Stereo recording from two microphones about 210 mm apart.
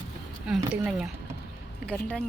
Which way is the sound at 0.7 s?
5° right (ahead or behind).